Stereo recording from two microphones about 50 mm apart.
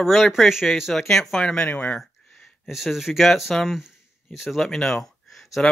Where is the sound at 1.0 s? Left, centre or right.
Centre.